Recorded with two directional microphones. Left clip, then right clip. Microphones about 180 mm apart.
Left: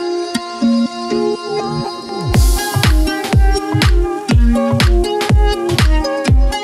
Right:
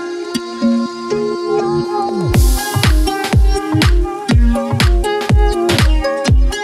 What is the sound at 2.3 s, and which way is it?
Music, centre (ahead or behind).